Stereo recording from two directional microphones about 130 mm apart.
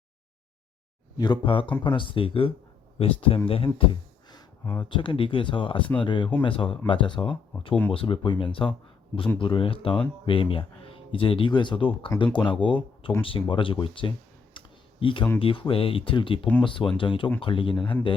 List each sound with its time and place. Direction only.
1.1 s speech: 35° left (ahead or behind)
3.8 s a sound: 35° left (ahead or behind)
4.8 s speech: 40° left (ahead or behind)
14.5 s computer keyboard: 40° left (ahead or behind)
15.4 s speech: 45° left (ahead or behind)